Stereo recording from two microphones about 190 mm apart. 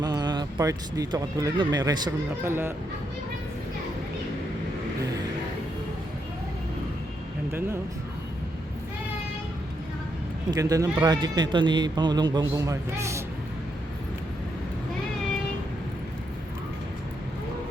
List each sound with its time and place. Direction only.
0.0 s speech: 20° right (ahead or behind)
10.5 s speech: 20° right (ahead or behind)